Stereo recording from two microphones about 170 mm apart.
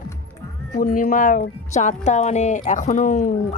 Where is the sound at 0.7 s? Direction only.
50° left (ahead or behind).